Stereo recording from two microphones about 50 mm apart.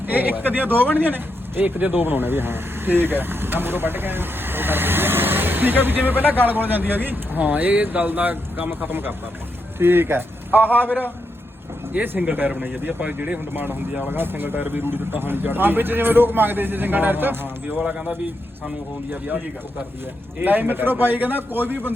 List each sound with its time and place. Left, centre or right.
0.1 s a man's voice: right
12.2 s a man's voice: right
14.1 s speech: right
20.4 s a man's voice: right